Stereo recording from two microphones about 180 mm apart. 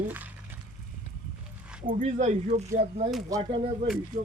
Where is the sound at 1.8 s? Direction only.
45° right (ahead or behind); by 3.6 s 30° right (ahead or behind).